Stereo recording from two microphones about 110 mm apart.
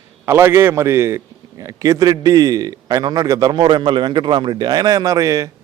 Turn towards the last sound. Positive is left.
turn(degrees=-30)  # may be behind; listen again after turning